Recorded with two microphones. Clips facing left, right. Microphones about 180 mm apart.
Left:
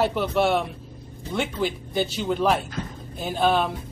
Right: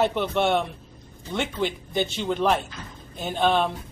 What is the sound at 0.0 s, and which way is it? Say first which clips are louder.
Speech: left 1 dB; 5° left (ahead or behind).